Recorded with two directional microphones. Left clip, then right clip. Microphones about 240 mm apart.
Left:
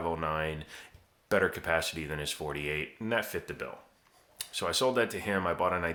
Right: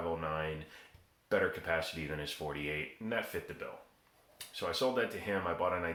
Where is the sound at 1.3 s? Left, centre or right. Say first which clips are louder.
Left 4 dB; left.